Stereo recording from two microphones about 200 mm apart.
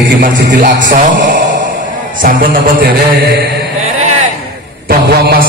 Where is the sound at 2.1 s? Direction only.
45° right (ahead or behind).